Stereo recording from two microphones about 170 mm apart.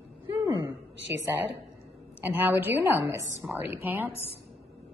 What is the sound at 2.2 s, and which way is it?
A woman's voice, 10° right (ahead or behind).